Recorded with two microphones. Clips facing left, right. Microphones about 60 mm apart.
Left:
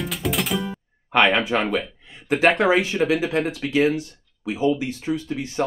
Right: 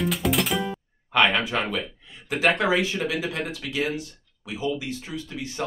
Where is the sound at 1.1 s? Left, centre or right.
Left.